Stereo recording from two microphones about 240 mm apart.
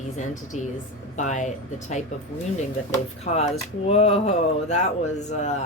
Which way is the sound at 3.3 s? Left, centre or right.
Left.